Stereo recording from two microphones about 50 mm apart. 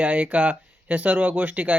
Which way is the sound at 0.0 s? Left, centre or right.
Right.